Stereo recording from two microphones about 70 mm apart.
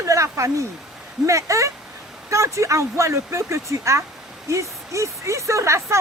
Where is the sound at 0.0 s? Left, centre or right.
Right.